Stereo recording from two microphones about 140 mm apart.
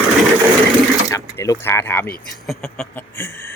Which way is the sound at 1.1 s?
25° left (ahead or behind).